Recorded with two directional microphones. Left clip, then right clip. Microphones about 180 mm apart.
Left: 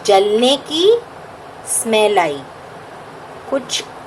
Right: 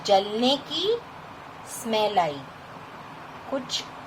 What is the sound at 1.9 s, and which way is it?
Speech, 25° left (ahead or behind).